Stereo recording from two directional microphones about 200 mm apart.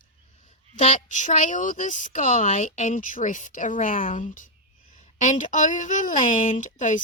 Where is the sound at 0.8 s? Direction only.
40° left (ahead or behind).